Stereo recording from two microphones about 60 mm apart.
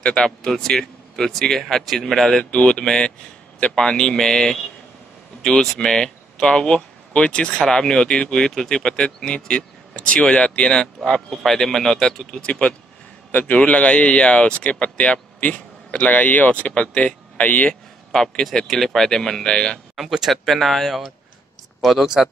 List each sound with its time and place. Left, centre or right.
0.0 s speech: centre
2.5 s speech: centre
13.3 s speech: left
18.1 s speech: centre
20.0 s speech: centre